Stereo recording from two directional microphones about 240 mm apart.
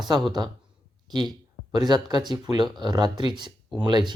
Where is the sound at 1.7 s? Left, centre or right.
Centre.